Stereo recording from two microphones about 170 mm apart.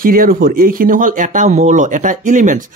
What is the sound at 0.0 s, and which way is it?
Speech, 55° right (ahead or behind).